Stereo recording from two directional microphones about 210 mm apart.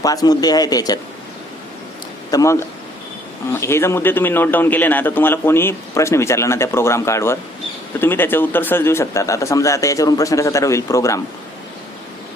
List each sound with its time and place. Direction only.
0.0 s a man's voice: 15° left (ahead or behind)
2.3 s a man's voice: 15° left (ahead or behind)